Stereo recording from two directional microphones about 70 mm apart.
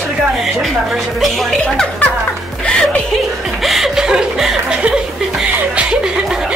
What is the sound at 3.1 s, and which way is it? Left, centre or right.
Chuckle, centre.